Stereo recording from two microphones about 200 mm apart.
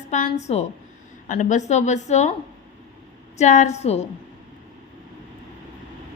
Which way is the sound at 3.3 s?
35° left (ahead or behind).